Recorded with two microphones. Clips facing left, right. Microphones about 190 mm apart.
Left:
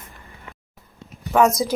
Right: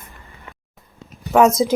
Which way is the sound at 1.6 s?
20° right (ahead or behind).